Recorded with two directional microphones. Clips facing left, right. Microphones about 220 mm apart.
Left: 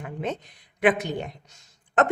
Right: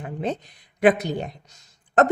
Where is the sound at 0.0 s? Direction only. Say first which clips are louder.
Right 3 dB; 35° right (ahead or behind).